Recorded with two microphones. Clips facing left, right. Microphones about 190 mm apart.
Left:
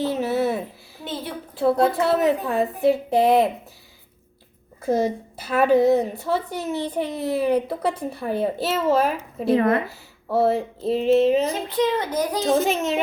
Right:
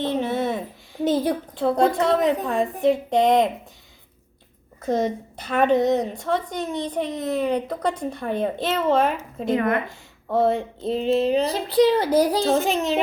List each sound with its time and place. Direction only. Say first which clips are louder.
0.0 s a sound: left 1 dB; 5° left (ahead or behind)
1.0 s a sound: right 10 dB; 40° right (ahead or behind)
1.8 s a woman's voice: right 2 dB; 5° left (ahead or behind)
4.8 s a woman's voice: left 1 dB; 10° left (ahead or behind)
9.5 s speech: left 3 dB; 30° left (ahead or behind)
10.3 s a woman's voice: even; 5° left (ahead or behind)
11.4 s a child's voice: right 4 dB; 35° right (ahead or behind)
12.6 s a woman's voice: even; centre (ahead or behind)